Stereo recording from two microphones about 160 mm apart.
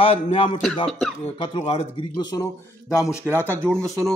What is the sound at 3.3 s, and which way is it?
Speech, 15° left (ahead or behind).